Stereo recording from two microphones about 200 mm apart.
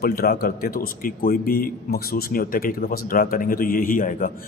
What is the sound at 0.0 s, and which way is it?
A man's voice, 50° left (ahead or behind).